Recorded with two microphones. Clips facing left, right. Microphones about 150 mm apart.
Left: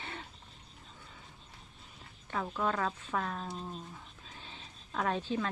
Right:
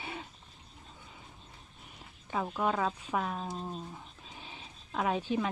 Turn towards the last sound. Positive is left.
turn(degrees=-15)  # may be behind; listen again after turning